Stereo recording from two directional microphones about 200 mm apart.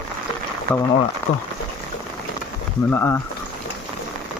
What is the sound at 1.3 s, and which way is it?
Speech, 90° left.